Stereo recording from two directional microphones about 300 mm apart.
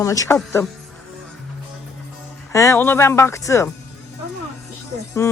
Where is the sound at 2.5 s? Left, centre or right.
Centre.